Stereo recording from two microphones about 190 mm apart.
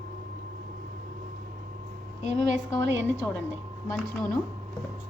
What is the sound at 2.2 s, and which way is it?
Speech, 65° right (ahead or behind).